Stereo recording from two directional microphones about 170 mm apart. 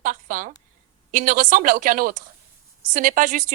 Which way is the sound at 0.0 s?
50° right (ahead or behind).